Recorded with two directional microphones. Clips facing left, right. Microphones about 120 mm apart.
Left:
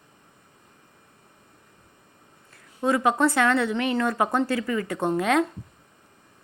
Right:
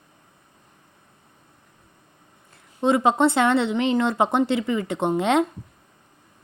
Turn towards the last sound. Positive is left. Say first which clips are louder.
# right 2 dB
turn(degrees=-25)  # may be behind; listen again after turning